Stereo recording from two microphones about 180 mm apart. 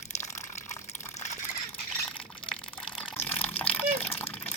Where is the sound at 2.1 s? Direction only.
5° left (ahead or behind).